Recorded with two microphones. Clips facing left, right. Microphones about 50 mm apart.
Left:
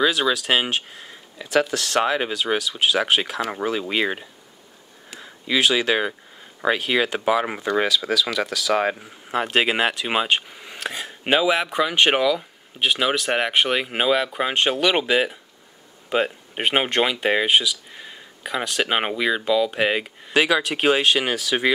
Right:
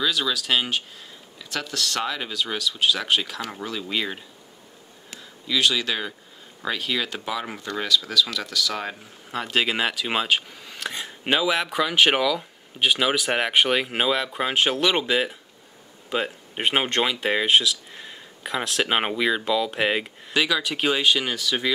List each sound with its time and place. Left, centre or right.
0.0 s speech: left
1.7 s speech: centre
2.0 s speech: left
7.9 s speech: centre
10.6 s a sound: centre
10.9 s speech: centre
20.7 s speech: centre